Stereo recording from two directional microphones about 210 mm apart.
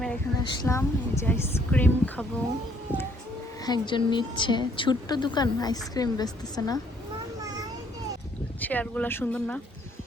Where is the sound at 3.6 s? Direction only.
20° left (ahead or behind).